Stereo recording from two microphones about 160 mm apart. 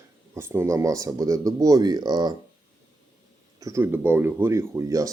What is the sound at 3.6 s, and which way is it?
Speech, 15° right (ahead or behind).